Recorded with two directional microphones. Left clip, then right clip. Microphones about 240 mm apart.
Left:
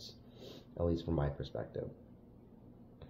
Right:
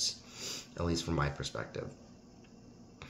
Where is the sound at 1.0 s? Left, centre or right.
Right.